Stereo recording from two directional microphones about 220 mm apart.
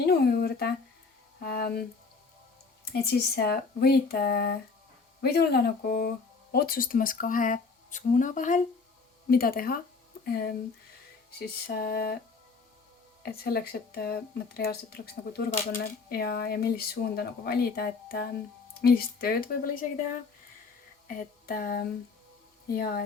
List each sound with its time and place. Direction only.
0.0 s speech: 45° left (ahead or behind)
2.9 s speech: 45° left (ahead or behind)
13.2 s speech: 45° left (ahead or behind)
21.1 s a sound: 40° left (ahead or behind)
22.7 s speech: 40° left (ahead or behind)